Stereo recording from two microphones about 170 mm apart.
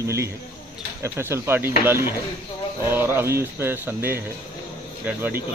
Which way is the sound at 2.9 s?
15° right (ahead or behind).